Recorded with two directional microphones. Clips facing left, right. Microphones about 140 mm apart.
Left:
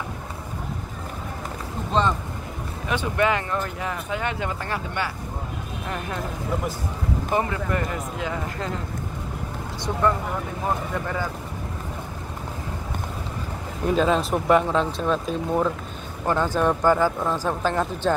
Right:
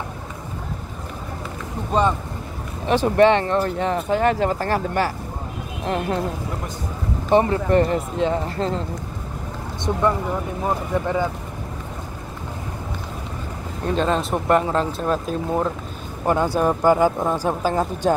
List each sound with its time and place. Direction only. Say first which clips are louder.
1.9 s speech: right 3 dB; 10° right (ahead or behind)
2.9 s speech: right 8 dB; 35° right (ahead or behind)
5.9 s speech: right 8 dB; 30° right (ahead or behind)
7.2 s speech: right 9 dB; 30° right (ahead or behind)
13.8 s speech: even; 5° left (ahead or behind); by 18.1 s 15° right (ahead or behind)